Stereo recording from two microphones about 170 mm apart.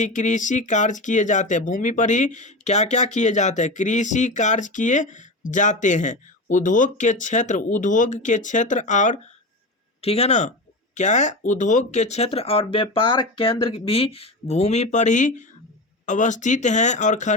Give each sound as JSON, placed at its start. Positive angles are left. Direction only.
{"t": 0.0, "sound": "speech", "side_deg": 45}